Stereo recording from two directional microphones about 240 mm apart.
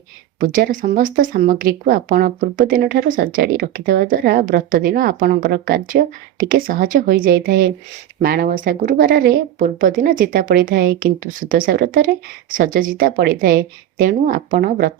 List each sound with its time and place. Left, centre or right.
0.3 s speech: right